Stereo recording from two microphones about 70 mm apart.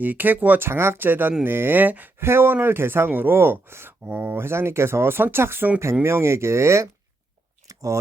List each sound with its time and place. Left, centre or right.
0.0 s speech: right
0.7 s speech: right
7.7 s chewing: right